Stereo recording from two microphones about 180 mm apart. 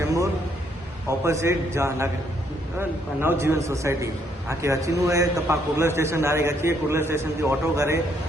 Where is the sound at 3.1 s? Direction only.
15° right (ahead or behind).